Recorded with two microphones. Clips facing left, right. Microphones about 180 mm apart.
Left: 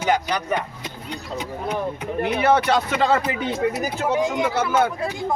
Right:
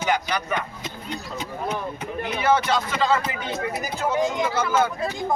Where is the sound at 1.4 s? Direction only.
10° left (ahead or behind).